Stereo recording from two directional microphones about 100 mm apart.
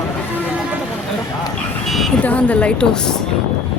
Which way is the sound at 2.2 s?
15° left (ahead or behind).